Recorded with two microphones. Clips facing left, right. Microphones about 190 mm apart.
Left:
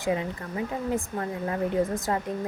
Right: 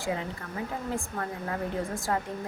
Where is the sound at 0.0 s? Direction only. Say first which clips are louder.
Left 4 dB; 20° left (ahead or behind).